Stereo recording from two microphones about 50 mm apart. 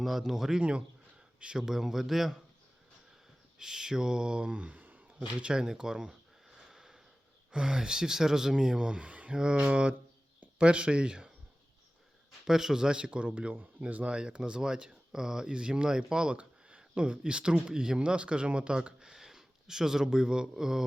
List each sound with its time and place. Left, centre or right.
0.0 s speech: centre
0.6 s speech: centre
3.6 s speech: centre
6.6 s sniff: centre
7.5 s speech: centre
12.5 s speech: centre
13.5 s speech: right
13.8 s speech: right; by 20.8 s centre